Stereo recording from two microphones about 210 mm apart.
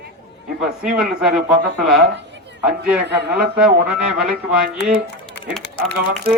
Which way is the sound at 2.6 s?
5° right (ahead or behind).